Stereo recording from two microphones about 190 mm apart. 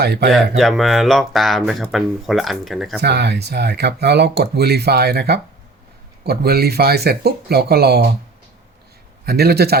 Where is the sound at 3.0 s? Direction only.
60° right (ahead or behind).